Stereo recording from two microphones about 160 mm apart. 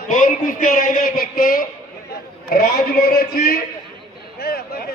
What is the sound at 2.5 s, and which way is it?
A man's voice, 65° left (ahead or behind).